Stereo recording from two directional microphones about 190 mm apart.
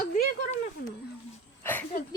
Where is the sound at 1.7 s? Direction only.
10° left (ahead or behind).